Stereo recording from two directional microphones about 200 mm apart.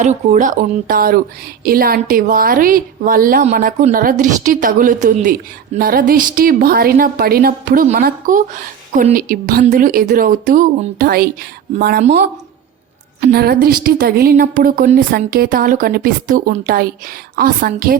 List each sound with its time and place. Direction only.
0.0 s a woman's voice: 35° right (ahead or behind)
13.2 s a woman's voice: 50° right (ahead or behind)